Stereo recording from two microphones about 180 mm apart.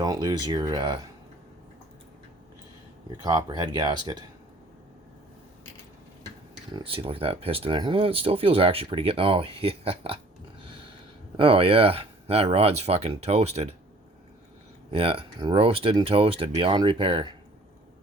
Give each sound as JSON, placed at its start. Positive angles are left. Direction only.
{"t": 0.0, "sound": "speech", "side_deg": -20}
{"t": 3.2, "sound": "speech", "side_deg": -25}
{"t": 6.7, "sound": "speech", "side_deg": -30}
{"t": 11.3, "sound": "speech", "side_deg": -30}
{"t": 14.8, "sound": "speech", "side_deg": -30}